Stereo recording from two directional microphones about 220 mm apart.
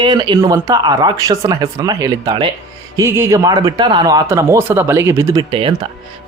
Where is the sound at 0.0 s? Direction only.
20° right (ahead or behind).